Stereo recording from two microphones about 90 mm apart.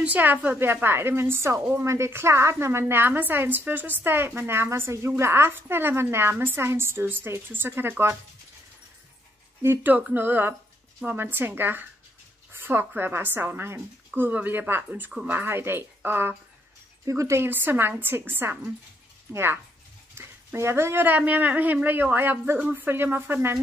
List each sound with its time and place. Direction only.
0.0 s a woman's voice: 20° right (ahead or behind)
9.6 s a woman's voice: 30° right (ahead or behind)